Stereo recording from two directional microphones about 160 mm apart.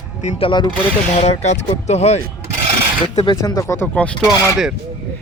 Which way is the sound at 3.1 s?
30° left (ahead or behind).